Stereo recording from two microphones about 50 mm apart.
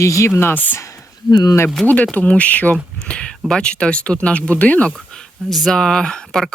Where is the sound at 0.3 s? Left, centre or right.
Left.